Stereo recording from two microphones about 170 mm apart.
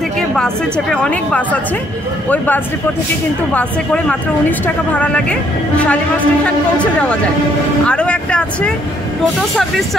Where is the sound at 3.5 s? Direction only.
5° left (ahead or behind).